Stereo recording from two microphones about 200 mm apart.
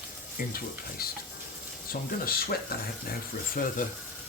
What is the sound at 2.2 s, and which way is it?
Speech, 50° left (ahead or behind).